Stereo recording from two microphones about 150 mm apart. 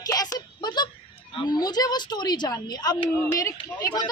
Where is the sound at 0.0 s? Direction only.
25° left (ahead or behind).